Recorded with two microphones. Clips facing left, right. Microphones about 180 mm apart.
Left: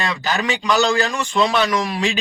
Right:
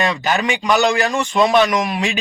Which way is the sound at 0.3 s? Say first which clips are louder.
Even; 15° right (ahead or behind).